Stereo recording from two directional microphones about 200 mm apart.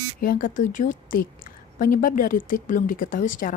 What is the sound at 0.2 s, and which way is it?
Speech, 45° left (ahead or behind).